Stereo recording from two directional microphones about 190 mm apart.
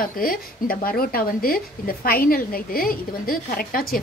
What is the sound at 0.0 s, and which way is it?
Speech, 50° left (ahead or behind).